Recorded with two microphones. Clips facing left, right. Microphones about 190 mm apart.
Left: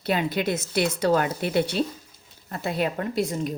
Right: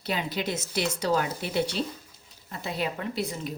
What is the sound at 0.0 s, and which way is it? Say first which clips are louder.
A woman's voice: left 5 dB; 55° left (ahead or behind).